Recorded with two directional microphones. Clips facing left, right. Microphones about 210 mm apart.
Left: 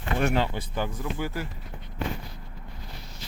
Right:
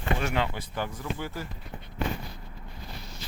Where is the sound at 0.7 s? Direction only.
15° left (ahead or behind).